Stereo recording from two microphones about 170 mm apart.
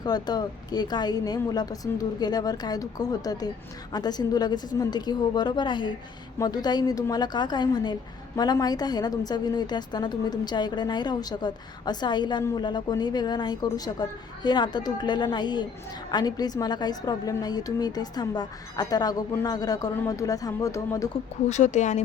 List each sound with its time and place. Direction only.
0.0 s a woman's voice: 25° left (ahead or behind)
21.5 s speech: 45° left (ahead or behind)